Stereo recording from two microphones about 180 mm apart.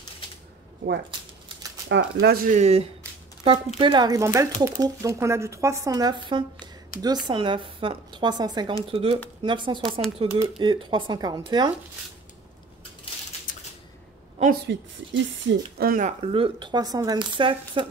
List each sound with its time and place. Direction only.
1.9 s speech: 80° right; by 2.8 s 40° right (ahead or behind)
3.4 s speech: 30° right (ahead or behind)
14.7 s speech: 80° right
15.8 s speech: 50° right (ahead or behind); by 17.8 s 30° right (ahead or behind)